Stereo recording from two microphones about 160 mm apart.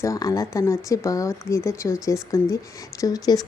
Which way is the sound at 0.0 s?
20° left (ahead or behind).